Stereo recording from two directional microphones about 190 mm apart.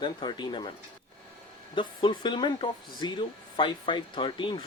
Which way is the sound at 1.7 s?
25° left (ahead or behind).